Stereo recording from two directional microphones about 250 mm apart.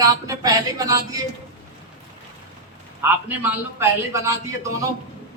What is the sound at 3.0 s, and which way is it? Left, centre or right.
A man's voice, centre.